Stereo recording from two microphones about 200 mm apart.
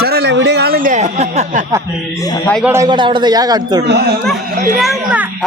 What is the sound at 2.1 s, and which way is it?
Speech, 15° left (ahead or behind).